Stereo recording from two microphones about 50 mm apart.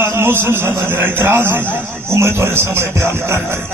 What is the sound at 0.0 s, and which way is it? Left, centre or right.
A man's voice, right.